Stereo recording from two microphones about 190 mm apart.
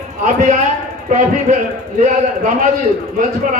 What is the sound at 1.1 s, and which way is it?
Speech, 45° right (ahead or behind).